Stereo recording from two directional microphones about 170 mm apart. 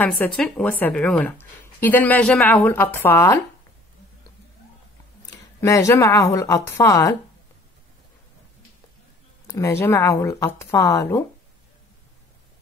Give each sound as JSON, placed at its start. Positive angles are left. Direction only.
{"t": 0.0, "sound": "a woman's voice", "side_deg": 10}
{"t": 5.3, "sound": "a woman's voice", "side_deg": 20}
{"t": 9.5, "sound": "a woman's voice", "side_deg": 15}